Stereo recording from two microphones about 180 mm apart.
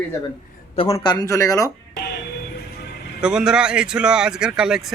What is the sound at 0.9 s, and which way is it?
Speech, 20° left (ahead or behind).